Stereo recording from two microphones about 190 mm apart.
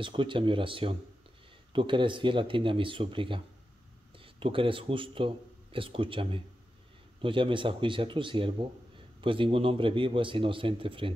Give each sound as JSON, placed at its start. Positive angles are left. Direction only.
{"t": 0.0, "sound": "a man's voice", "side_deg": -25}